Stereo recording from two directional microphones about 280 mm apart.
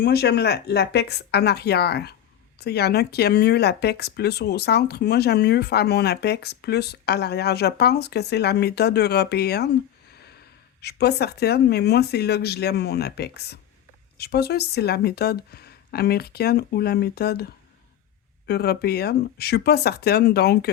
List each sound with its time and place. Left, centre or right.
0.0 s speech: left
10.8 s speech: left